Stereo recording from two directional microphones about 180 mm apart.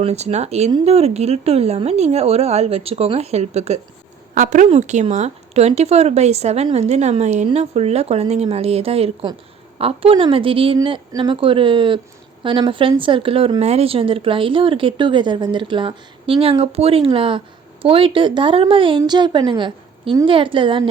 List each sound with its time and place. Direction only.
0.0 s speech: 35° right (ahead or behind)